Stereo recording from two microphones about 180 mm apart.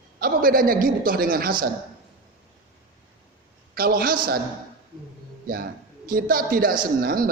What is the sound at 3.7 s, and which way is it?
Speech, 55° right (ahead or behind).